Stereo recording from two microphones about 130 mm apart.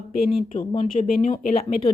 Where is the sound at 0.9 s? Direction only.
90° left.